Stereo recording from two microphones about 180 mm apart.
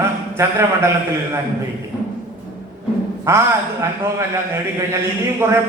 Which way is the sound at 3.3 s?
15° right (ahead or behind).